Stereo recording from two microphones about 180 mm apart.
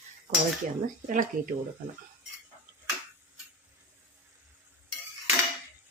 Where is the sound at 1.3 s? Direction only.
50° right (ahead or behind).